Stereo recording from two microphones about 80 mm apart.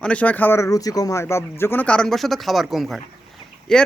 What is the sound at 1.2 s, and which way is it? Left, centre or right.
Speech, left.